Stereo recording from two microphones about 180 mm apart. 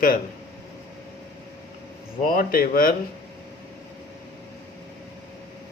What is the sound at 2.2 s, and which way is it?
Speech, 50° left (ahead or behind).